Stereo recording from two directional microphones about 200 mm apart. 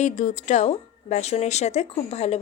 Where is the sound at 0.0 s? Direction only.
40° left (ahead or behind).